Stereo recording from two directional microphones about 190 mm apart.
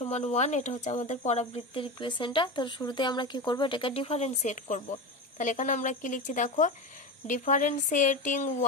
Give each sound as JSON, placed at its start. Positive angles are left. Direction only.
{"t": 0.0, "sound": "speech", "side_deg": 35}